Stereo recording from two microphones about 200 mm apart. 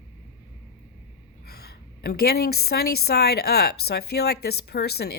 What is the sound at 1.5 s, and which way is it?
A woman's voice, 50° left (ahead or behind).